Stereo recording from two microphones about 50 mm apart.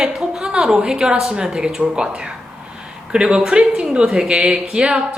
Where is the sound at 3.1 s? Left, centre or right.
Centre.